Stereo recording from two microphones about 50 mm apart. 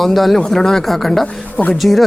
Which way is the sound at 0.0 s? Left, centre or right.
Centre.